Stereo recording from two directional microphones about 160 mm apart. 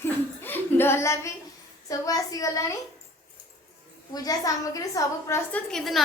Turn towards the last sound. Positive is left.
turn(degrees=0)  # may be behind; listen again after turning